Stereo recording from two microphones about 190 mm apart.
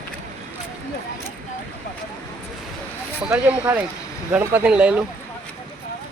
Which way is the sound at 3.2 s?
5° right (ahead or behind).